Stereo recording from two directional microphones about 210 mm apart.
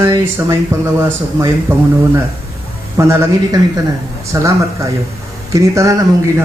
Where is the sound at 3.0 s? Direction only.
15° right (ahead or behind).